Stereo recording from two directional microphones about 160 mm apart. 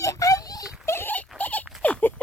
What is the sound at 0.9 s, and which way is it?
Dog, 15° left (ahead or behind).